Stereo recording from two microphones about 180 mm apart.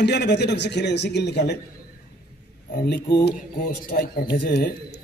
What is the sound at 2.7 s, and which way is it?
A man's voice, 65° left (ahead or behind).